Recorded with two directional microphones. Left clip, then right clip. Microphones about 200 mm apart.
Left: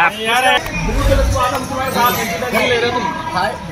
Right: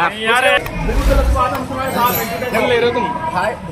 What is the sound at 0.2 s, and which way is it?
Speech, 20° left (ahead or behind).